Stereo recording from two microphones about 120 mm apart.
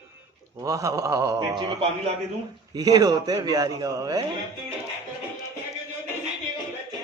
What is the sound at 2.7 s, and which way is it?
A man's voice, 35° right (ahead or behind).